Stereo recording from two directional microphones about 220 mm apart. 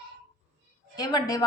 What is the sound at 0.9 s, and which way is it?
Speech, 15° left (ahead or behind).